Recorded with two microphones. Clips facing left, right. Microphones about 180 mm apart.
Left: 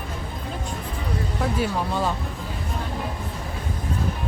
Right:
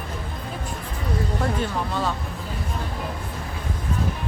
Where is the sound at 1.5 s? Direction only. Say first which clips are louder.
Left 1 dB; 10° left (ahead or behind).